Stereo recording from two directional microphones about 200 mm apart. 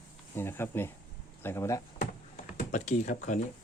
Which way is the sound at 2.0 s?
40° left (ahead or behind).